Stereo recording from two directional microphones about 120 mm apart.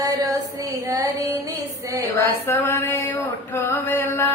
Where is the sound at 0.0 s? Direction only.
30° right (ahead or behind).